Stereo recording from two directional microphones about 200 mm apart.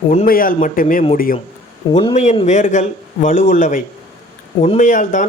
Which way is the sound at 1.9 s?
25° left (ahead or behind).